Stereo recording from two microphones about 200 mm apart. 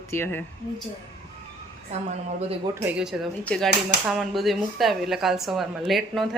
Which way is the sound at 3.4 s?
5° left (ahead or behind).